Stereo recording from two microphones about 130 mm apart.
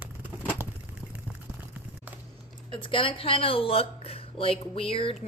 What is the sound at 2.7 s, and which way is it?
Speech, 40° left (ahead or behind).